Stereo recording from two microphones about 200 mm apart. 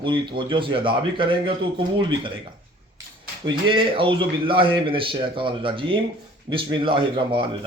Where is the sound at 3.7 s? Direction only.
25° right (ahead or behind).